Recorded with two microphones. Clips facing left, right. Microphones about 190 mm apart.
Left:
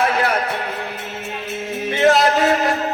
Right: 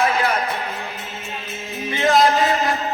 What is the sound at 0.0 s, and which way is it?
Music, 65° left (ahead or behind).